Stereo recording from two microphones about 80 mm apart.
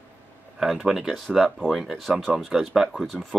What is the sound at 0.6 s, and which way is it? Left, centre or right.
Speech, centre.